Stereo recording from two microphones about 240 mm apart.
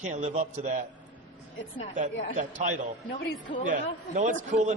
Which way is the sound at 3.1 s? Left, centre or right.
Left.